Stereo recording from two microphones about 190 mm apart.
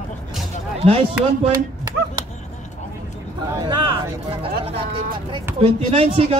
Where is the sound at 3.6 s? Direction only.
25° right (ahead or behind).